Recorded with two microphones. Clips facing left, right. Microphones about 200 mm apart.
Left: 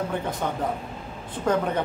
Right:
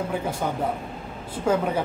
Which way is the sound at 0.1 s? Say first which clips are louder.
Right 1 dB; 10° right (ahead or behind).